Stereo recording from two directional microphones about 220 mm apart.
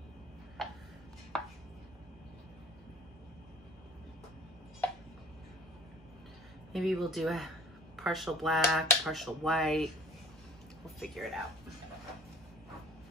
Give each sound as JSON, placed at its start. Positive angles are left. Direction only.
{"t": 0.6, "sound": "music", "side_deg": 0}
{"t": 1.3, "sound": "chopping", "side_deg": 5}
{"t": 6.7, "sound": "a woman's voice", "side_deg": 0}
{"t": 11.0, "sound": "speech", "side_deg": 0}